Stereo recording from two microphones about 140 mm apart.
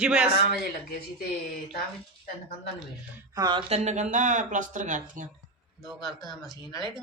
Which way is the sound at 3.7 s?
50° right (ahead or behind).